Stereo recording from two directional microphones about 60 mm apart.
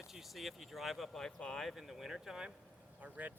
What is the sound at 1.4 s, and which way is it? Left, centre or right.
Speech, centre.